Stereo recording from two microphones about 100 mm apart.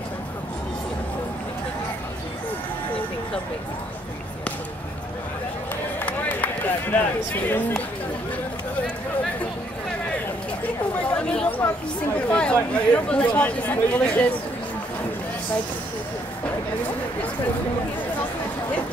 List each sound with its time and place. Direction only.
6.0 s run: 15° left (ahead or behind)
11.0 s chatter: 15° left (ahead or behind)
12.2 s speech: 10° left (ahead or behind)